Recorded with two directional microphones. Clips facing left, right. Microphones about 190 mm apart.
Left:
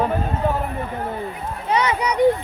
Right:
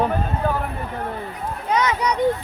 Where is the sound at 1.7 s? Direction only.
10° left (ahead or behind).